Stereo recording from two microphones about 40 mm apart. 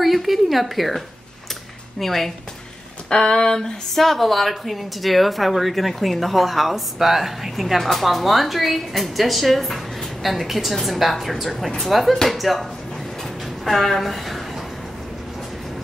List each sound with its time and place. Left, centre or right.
0.0 s speech: centre
3.1 s speech: left
3.9 s speech: centre
13.2 s a sound: centre